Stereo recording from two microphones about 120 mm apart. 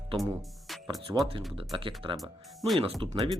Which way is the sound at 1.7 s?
45° right (ahead or behind).